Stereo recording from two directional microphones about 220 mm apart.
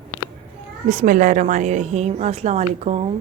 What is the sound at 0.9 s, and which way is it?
A woman's voice, 35° right (ahead or behind).